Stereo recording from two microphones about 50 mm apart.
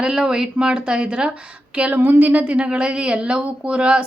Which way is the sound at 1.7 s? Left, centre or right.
Right.